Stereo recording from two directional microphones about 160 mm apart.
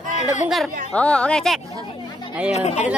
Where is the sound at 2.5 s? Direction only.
45° left (ahead or behind).